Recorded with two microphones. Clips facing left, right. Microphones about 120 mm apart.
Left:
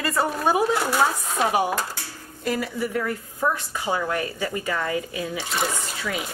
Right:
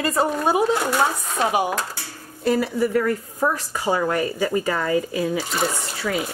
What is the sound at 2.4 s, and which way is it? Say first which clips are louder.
A woman's voice: right 6 dB; 35° right (ahead or behind).